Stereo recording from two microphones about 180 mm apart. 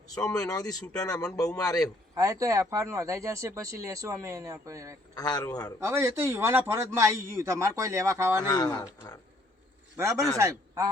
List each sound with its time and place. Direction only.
0.1 s speech: 20° left (ahead or behind)
2.1 s speech: 20° right (ahead or behind)
5.1 s speech: 20° left (ahead or behind)
5.8 s speech: 15° right (ahead or behind)
8.4 s speech: 20° left (ahead or behind)
10.0 s speech: 15° right (ahead or behind)